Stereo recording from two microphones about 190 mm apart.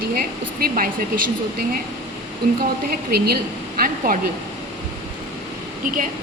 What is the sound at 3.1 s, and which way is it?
Speech, 55° right (ahead or behind).